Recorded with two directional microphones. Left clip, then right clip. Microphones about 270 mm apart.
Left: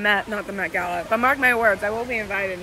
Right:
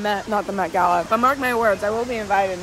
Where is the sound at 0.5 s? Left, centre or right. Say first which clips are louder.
Right 6 dB; right.